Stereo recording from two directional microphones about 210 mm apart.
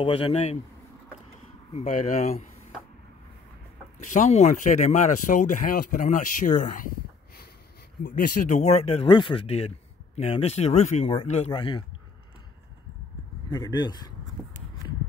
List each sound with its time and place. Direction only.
0.0 s speech: 25° left (ahead or behind)
1.7 s speech: 35° left (ahead or behind)
4.0 s speech: 35° left (ahead or behind)
8.0 s speech: 40° left (ahead or behind)
13.5 s speech: 20° left (ahead or behind)